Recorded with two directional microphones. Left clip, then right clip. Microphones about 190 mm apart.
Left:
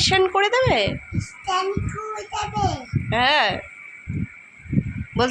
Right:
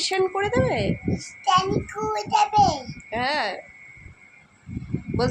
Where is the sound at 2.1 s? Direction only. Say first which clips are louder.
Right 9 dB; 20° right (ahead or behind).